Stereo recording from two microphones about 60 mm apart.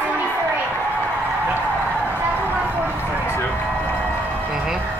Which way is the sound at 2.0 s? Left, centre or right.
Right.